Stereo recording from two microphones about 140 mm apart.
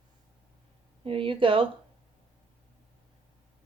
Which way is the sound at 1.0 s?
40° right (ahead or behind).